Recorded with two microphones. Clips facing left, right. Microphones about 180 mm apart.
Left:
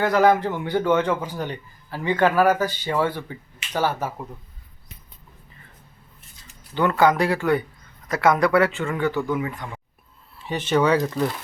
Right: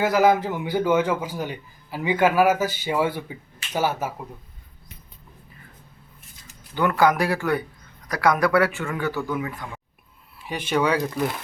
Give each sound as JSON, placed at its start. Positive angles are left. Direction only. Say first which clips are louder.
{"t": 0.0, "sound": "speech", "louder": "left 1 dB", "side_deg": -5}
{"t": 7.0, "sound": "speech", "louder": "left 1 dB", "side_deg": 20}
{"t": 10.4, "sound": "speech", "louder": "left 3 dB", "side_deg": -10}